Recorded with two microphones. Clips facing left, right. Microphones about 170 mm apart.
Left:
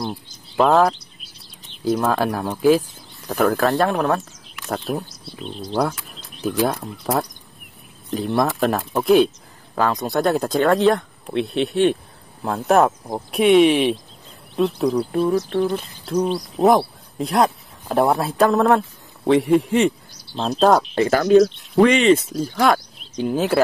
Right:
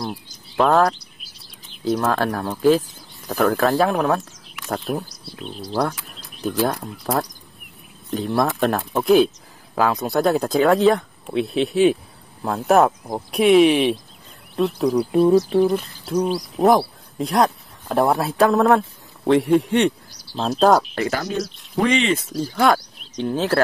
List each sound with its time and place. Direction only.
0.0 s chirp: centre (ahead or behind)
2.1 s speech: 10° left (ahead or behind)
21.1 s speech: 60° left (ahead or behind)
22.3 s speech: centre (ahead or behind)